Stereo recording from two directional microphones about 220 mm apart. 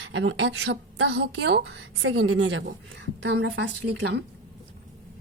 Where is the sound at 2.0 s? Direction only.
70° right (ahead or behind); by 4.2 s 50° right (ahead or behind).